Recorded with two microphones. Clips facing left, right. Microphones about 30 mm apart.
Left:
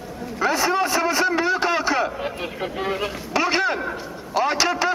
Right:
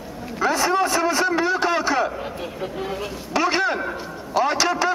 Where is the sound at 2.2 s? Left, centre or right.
Left.